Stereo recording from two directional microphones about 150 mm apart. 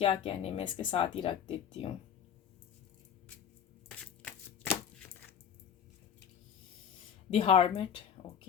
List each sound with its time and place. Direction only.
0.0 s speech: 35° left (ahead or behind)
3.8 s shuffling cards: 10° left (ahead or behind)
7.3 s speech: 40° left (ahead or behind)